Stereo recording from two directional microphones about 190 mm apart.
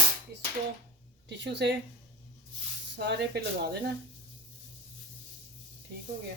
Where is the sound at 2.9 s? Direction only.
65° right (ahead or behind).